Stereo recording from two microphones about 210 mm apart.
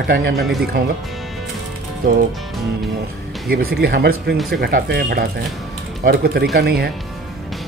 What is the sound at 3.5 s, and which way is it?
Speech, 45° right (ahead or behind).